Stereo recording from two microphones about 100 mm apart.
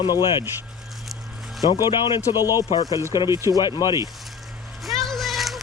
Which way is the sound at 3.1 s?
50° left (ahead or behind).